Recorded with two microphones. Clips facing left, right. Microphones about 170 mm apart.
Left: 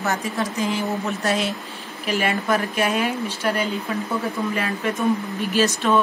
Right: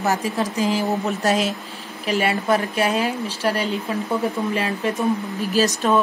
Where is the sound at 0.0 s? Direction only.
35° right (ahead or behind).